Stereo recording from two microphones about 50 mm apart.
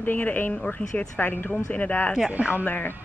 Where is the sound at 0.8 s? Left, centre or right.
Left.